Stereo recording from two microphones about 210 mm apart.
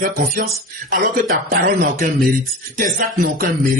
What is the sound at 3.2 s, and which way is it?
Speech, 45° right (ahead or behind).